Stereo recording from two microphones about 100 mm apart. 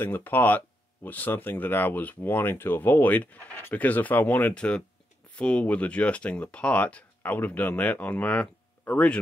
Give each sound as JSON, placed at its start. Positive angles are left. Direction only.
{"t": 0.0, "sound": "speech", "side_deg": 20}